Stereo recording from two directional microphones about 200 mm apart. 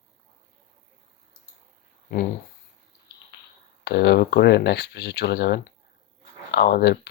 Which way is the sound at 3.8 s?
55° left (ahead or behind).